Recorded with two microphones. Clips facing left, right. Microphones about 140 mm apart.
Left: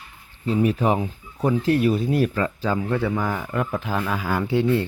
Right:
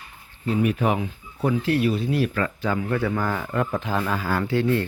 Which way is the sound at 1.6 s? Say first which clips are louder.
Left 2 dB; 40° left (ahead or behind).